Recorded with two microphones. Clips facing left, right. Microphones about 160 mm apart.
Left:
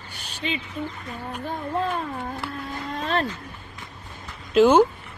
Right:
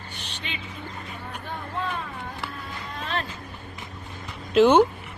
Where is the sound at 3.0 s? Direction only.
35° left (ahead or behind).